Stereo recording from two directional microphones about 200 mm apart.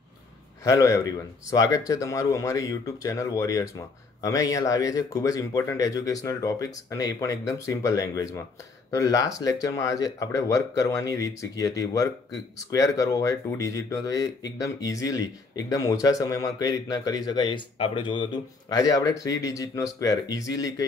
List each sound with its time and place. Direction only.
0.7 s speech: 15° left (ahead or behind)